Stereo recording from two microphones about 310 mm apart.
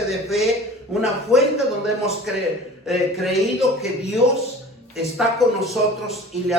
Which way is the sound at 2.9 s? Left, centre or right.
Centre.